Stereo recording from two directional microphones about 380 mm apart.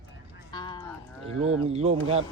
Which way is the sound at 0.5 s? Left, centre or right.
Centre.